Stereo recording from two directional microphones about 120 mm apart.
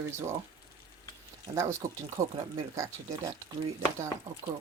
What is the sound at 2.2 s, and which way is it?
Speech, 90° right.